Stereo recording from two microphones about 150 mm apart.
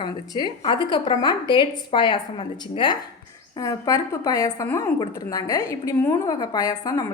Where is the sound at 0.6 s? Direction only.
30° left (ahead or behind).